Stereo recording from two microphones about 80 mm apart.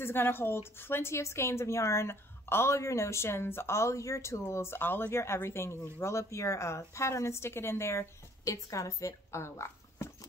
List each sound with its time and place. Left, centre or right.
0.0 s a woman's voice: left